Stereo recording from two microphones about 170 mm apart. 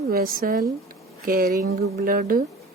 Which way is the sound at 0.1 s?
60° right (ahead or behind).